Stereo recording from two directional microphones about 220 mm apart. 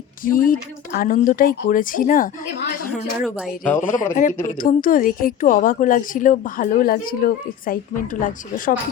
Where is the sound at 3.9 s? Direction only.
35° left (ahead or behind).